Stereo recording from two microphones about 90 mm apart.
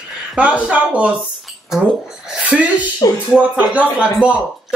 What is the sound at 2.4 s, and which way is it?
A man's voice, 15° right (ahead or behind).